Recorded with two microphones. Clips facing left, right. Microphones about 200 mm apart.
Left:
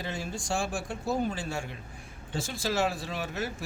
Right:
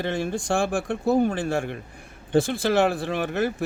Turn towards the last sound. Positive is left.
turn(degrees=-60)  # may be behind; listen again after turning